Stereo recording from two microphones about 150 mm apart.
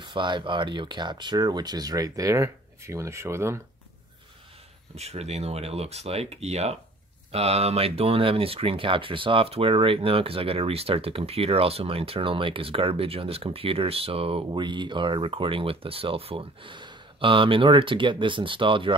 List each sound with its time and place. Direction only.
0.0 s speech: 30° right (ahead or behind)
4.9 s speech: 45° right (ahead or behind)